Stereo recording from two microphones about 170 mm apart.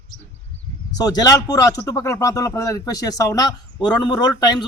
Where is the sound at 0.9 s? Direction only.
20° left (ahead or behind).